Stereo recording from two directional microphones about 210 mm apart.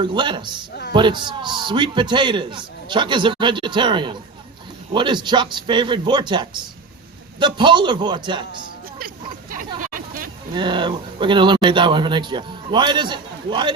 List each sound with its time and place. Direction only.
0.0 s speech: 20° right (ahead or behind)
9.0 s a sound: 40° right (ahead or behind)
9.8 s hubbub: 40° right (ahead or behind)
10.5 s speech: 20° right (ahead or behind)